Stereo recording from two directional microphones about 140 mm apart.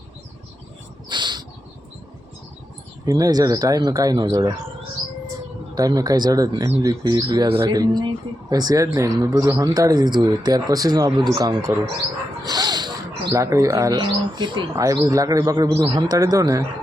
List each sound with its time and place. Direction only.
1.1 s a sound: 35° right (ahead or behind)
3.1 s speech: 25° right (ahead or behind)
5.7 s speech: 25° right (ahead or behind)
12.5 s dog: 30° right (ahead or behind)
13.3 s speech: 20° right (ahead or behind)
14.0 s speech: 35° right (ahead or behind)
14.8 s speech: 25° right (ahead or behind)